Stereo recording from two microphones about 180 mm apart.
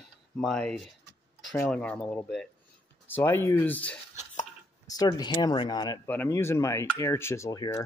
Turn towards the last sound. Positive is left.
turn(degrees=20)  # may be behind; listen again after turning